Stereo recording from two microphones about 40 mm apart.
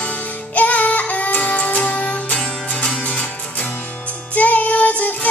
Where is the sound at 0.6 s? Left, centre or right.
Left.